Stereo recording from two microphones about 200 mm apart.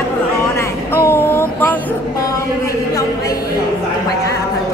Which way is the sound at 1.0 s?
10° left (ahead or behind).